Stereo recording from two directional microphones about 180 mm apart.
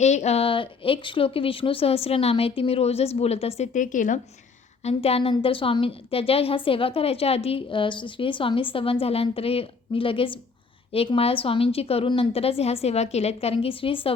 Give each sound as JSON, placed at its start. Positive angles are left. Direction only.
{"t": 0.0, "sound": "speech", "side_deg": 40}
{"t": 4.8, "sound": "speech", "side_deg": 35}